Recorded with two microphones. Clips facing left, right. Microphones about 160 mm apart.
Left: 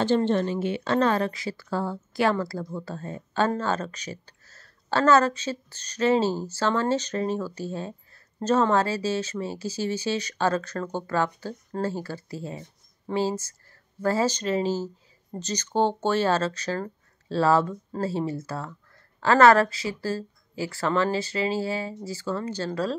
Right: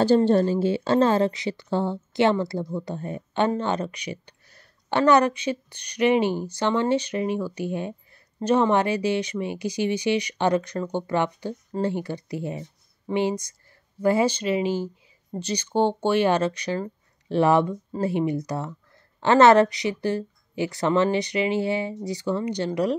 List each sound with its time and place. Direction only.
0.0 s a woman's voice: 35° right (ahead or behind); by 22.9 s 20° right (ahead or behind)